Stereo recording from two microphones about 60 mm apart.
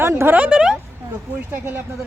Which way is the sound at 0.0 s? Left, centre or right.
Right.